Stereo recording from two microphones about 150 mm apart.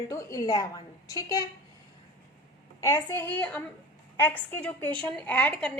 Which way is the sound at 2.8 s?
15° left (ahead or behind).